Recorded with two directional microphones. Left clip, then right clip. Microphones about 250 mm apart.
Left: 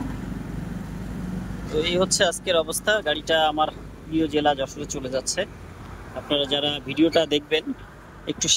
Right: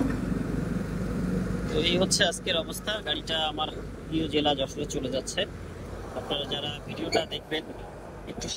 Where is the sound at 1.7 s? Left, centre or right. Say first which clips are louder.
Left 4 dB; centre.